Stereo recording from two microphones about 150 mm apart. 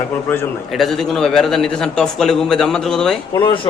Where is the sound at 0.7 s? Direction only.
Centre (ahead or behind).